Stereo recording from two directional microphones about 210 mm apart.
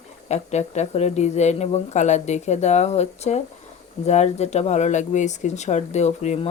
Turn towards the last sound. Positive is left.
turn(degrees=30)  # may be behind; listen again after turning